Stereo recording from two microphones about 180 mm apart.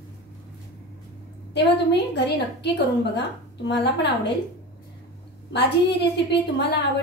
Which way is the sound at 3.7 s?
70° left (ahead or behind).